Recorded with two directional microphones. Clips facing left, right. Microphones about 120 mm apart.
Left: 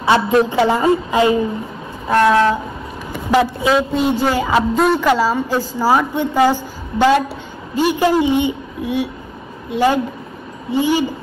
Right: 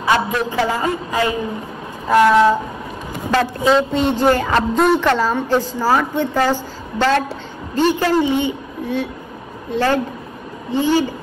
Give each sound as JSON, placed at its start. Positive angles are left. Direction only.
{"t": 0.0, "sound": "speech", "side_deg": 25}
{"t": 2.0, "sound": "train", "side_deg": -5}
{"t": 3.3, "sound": "a woman's voice", "side_deg": 10}